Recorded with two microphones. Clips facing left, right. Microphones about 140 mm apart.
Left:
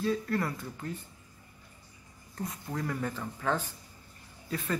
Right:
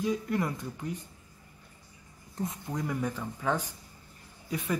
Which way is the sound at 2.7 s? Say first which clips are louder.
Even; 10° right (ahead or behind).